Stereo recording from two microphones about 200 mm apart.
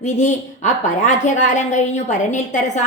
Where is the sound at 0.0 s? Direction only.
35° left (ahead or behind).